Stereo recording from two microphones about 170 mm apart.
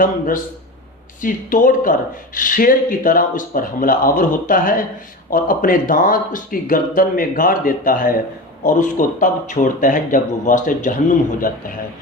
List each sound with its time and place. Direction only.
1.2 s speech: 50° left (ahead or behind)